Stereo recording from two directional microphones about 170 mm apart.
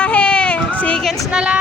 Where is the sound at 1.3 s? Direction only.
5° right (ahead or behind).